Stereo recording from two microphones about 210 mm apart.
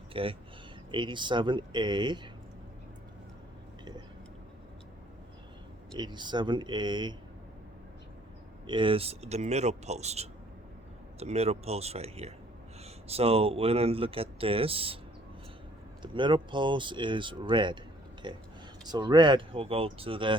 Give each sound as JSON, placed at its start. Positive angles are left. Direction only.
{"t": 0.1, "sound": "speech", "side_deg": -25}
{"t": 6.0, "sound": "speech", "side_deg": -20}
{"t": 8.6, "sound": "speech", "side_deg": -25}
{"t": 16.1, "sound": "speech", "side_deg": -20}